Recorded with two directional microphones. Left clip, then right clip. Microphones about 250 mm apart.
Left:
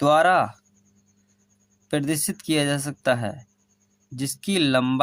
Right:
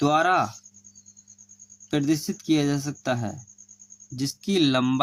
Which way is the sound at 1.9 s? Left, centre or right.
Left.